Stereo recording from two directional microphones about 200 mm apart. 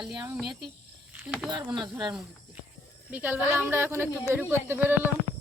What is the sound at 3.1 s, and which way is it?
Speech, 10° right (ahead or behind).